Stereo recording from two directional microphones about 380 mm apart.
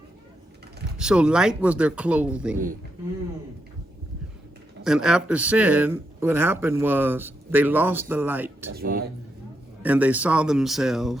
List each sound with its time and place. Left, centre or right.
0.9 s a man's voice: centre
4.8 s a man's voice: centre
8.7 s speech: right
9.8 s a man's voice: centre